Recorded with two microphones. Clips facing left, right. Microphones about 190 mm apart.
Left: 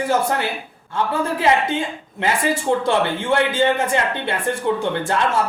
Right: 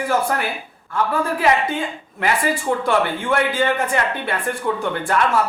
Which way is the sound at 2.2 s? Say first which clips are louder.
Even; 25° left (ahead or behind).